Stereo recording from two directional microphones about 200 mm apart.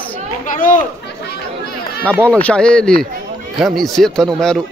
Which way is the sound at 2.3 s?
5° left (ahead or behind).